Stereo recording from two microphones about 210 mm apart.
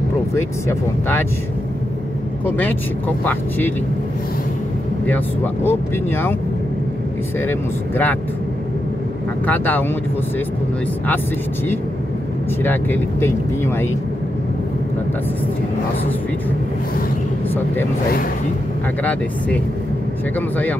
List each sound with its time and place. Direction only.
0.3 s speech: 10° left (ahead or behind)
2.4 s speech: 10° left (ahead or behind)
5.0 s speech: 10° left (ahead or behind)
7.3 s speech: 10° left (ahead or behind)
9.5 s speech: 10° left (ahead or behind)
12.6 s speech: 10° left (ahead or behind)
20.3 s speech: 10° left (ahead or behind)